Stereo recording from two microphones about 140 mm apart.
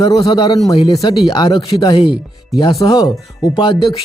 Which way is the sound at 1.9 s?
40° left (ahead or behind).